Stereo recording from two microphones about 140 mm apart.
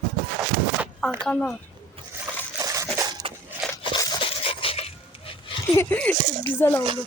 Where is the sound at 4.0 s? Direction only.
35° left (ahead or behind).